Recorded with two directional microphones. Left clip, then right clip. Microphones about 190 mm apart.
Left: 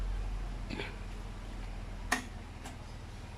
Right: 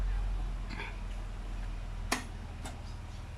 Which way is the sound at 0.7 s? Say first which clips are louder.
Left 2 dB; 15° left (ahead or behind).